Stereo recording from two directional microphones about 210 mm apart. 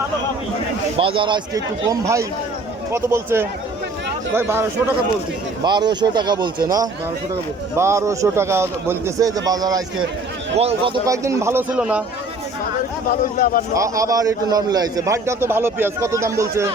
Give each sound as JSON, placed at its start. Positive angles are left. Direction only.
{"t": 0.9, "sound": "a man's voice", "side_deg": -25}
{"t": 5.6, "sound": "a man's voice", "side_deg": -20}
{"t": 7.8, "sound": "a man's voice", "side_deg": -15}
{"t": 10.6, "sound": "a man's voice", "side_deg": -30}
{"t": 11.0, "sound": "a man's voice", "side_deg": -15}
{"t": 13.1, "sound": "speech", "side_deg": 40}
{"t": 13.7, "sound": "a man's voice", "side_deg": -15}